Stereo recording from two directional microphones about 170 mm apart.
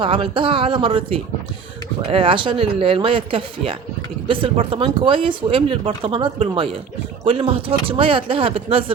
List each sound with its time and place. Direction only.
0.0 s speech: 30° right (ahead or behind)